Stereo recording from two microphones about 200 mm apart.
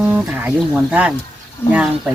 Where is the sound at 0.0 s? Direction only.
10° right (ahead or behind).